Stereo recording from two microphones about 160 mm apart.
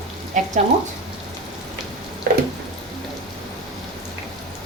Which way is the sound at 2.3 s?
70° right (ahead or behind).